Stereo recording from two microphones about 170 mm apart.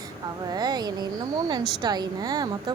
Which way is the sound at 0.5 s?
25° right (ahead or behind).